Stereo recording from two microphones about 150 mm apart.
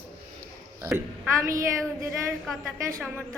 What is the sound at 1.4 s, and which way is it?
Speech, 20° right (ahead or behind).